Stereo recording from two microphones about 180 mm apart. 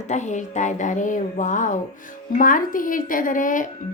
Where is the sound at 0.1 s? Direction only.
40° left (ahead or behind).